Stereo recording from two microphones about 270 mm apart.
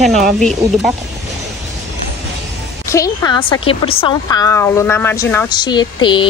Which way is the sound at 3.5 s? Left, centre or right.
Left.